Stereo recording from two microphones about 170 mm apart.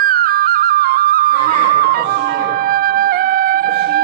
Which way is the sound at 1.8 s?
60° right (ahead or behind).